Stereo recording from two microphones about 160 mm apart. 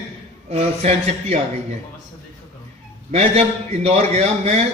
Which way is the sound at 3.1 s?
45° right (ahead or behind).